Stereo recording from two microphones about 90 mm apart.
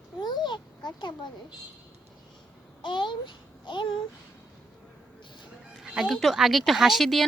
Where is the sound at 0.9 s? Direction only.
55° left (ahead or behind).